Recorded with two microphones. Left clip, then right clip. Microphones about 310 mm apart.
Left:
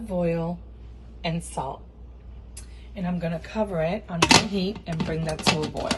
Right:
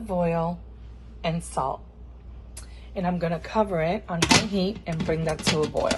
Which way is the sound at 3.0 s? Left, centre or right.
Right.